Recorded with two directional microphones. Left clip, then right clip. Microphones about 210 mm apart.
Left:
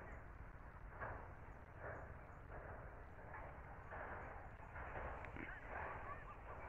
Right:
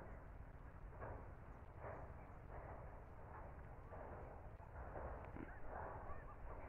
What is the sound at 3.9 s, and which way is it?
Horse, 30° left (ahead or behind).